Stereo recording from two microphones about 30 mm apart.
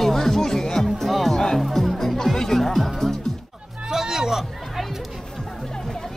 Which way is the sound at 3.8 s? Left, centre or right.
Centre.